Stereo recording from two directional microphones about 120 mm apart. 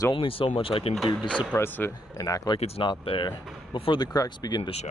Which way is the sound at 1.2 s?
10° left (ahead or behind).